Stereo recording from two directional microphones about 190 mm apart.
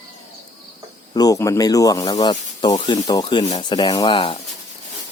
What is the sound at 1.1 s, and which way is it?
Speech, 20° left (ahead or behind).